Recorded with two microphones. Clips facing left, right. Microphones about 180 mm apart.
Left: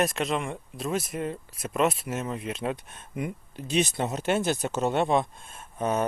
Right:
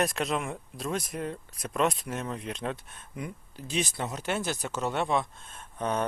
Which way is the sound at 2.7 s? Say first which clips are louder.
Left 5 dB; 20° left (ahead or behind).